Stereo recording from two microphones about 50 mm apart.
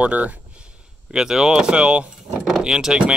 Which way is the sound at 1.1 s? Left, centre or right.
Centre.